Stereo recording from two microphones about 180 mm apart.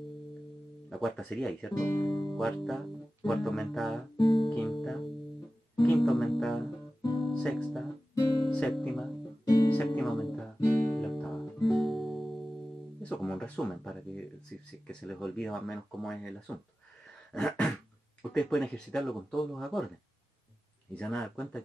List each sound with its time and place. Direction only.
0.8 s speech: centre (ahead or behind)
4.2 s guitar: 30° left (ahead or behind)
4.5 s speech: centre (ahead or behind)
5.8 s music: centre (ahead or behind)
7.2 s speech: centre (ahead or behind)
9.4 s music: 20° left (ahead or behind)
9.7 s speech: 5° left (ahead or behind)
10.9 s guitar: centre (ahead or behind)
13.0 s speech: centre (ahead or behind)
20.9 s speech: 5° left (ahead or behind)